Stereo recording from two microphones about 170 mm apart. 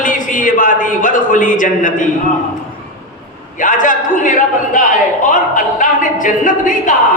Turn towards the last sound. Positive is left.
turn(degrees=50)  # may be behind; listen again after turning